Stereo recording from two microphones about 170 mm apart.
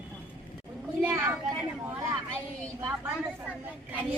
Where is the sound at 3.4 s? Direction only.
10° right (ahead or behind).